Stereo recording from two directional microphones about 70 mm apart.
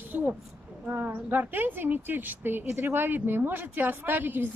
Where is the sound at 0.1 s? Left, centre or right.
Right.